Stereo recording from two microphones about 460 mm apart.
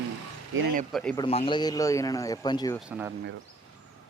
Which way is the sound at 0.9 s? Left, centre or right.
Centre.